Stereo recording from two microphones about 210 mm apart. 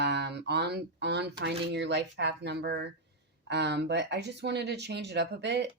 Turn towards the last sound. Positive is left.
turn(degrees=-55)  # may be behind; listen again after turning